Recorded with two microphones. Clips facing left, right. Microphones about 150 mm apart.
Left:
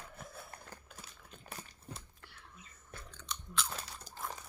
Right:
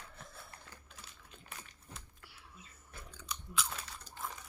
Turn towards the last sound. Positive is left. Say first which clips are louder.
# even
turn(degrees=-5)  # may be behind; listen again after turning